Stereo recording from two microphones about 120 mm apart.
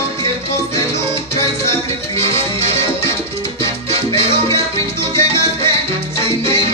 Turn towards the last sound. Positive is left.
turn(degrees=20)  # may be behind; listen again after turning